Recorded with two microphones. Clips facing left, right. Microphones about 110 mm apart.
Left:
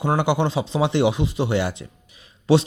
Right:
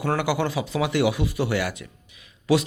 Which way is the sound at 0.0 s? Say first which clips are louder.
Left 3 dB; 25° left (ahead or behind).